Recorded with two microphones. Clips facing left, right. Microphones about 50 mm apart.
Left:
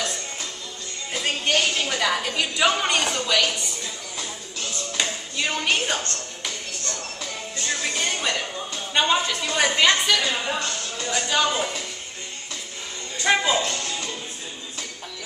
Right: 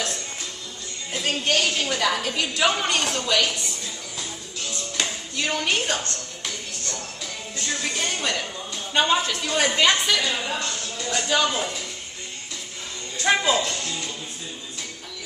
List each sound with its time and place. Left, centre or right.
1.1 s a woman's voice: centre
4.9 s music: centre
7.8 s music: centre
8.9 s a woman's voice: centre
10.3 s speech: centre
11.1 s a woman's voice: centre
13.2 s speech: centre
13.6 s music: left